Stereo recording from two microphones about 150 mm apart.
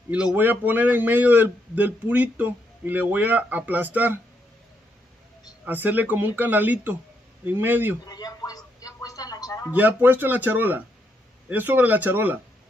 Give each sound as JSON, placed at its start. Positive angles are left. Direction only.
{"t": 0.1, "sound": "a man's voice", "side_deg": -10}
{"t": 5.7, "sound": "a man's voice", "side_deg": -10}
{"t": 8.1, "sound": "a sound", "side_deg": 25}
{"t": 9.7, "sound": "a man's voice", "side_deg": -10}